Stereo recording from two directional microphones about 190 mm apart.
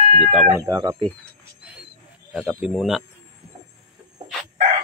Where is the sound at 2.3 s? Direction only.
Centre (ahead or behind).